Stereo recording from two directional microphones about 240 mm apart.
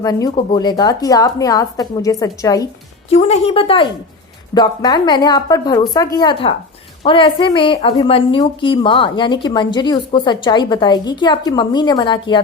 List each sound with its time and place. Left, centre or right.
0.0 s speech: centre
3.1 s a woman's voice: left